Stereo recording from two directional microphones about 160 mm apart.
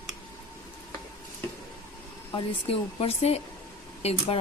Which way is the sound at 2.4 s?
40° left (ahead or behind).